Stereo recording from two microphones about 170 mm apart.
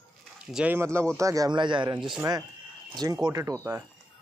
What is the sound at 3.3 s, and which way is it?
Speech, 20° right (ahead or behind).